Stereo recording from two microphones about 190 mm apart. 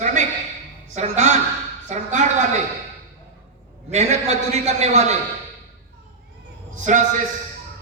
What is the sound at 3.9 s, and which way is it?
A man's voice, 35° right (ahead or behind).